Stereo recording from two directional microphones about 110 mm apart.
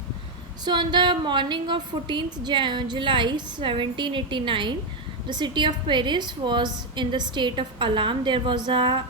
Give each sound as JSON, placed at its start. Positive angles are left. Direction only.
{"t": 0.6, "sound": "a woman's voice", "side_deg": -45}